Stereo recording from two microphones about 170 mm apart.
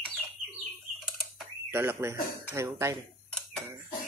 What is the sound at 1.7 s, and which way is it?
Speech, 15° right (ahead or behind).